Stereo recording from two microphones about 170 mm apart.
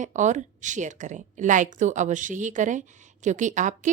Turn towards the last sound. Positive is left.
turn(degrees=-45)  # may be behind; listen again after turning